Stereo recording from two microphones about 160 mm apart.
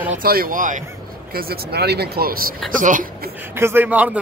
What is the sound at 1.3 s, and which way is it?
Speech, 70° right (ahead or behind).